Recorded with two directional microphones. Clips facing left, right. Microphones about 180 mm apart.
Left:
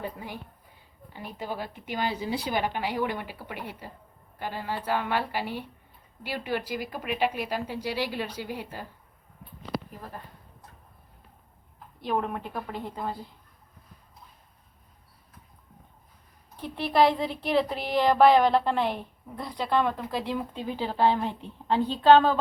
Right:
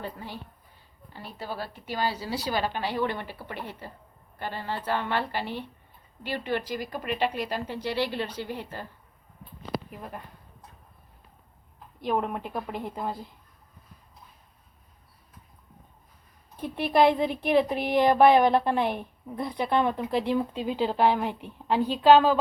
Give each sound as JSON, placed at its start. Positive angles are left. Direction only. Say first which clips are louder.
{"t": 0.0, "sound": "speech", "louder": "left 1 dB", "side_deg": 10}
{"t": 12.0, "sound": "speech", "louder": "right 1 dB", "side_deg": -15}
{"t": 16.6, "sound": "speech", "louder": "right 1 dB", "side_deg": -15}